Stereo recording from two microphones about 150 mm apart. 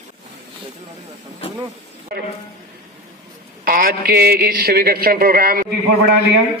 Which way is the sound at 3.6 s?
80° right.